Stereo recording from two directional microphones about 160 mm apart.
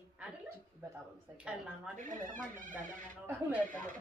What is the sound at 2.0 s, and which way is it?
Speech, 55° right (ahead or behind).